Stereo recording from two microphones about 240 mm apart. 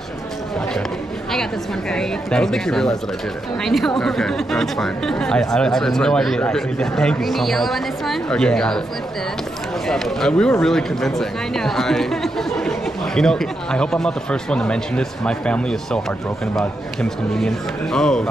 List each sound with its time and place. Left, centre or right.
1.3 s speech: centre
9.8 s speech: centre